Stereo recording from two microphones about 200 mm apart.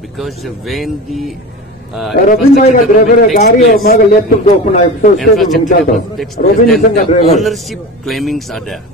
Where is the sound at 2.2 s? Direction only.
40° left (ahead or behind).